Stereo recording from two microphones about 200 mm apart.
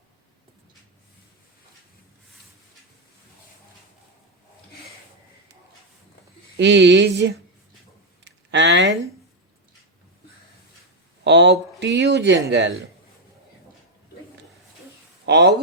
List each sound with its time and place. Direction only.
6.6 s speech: 60° right (ahead or behind)
8.2 s a sound: 60° right (ahead or behind)
11.2 s speech: 60° right (ahead or behind)
15.3 s speech: 55° right (ahead or behind)